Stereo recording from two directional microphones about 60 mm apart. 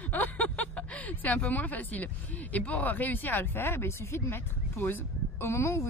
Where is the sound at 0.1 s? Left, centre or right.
Left.